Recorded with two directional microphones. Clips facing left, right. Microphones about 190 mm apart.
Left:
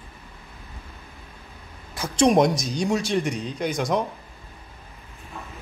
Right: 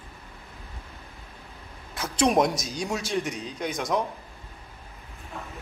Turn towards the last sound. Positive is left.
turn(degrees=0)  # may be behind; listen again after turning